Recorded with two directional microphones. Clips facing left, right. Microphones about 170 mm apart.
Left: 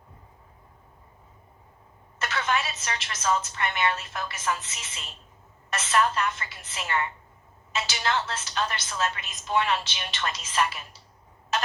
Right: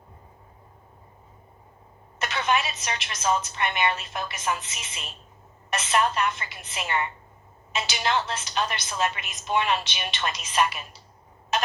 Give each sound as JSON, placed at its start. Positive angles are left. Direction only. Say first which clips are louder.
{"t": 2.1, "sound": "a woman's voice", "louder": "right 2 dB", "side_deg": -15}